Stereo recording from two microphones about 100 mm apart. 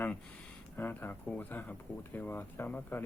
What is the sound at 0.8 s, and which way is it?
Speech, 20° left (ahead or behind).